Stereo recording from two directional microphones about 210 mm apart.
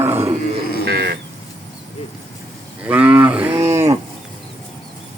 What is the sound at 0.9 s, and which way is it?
Livestock, 50° right (ahead or behind).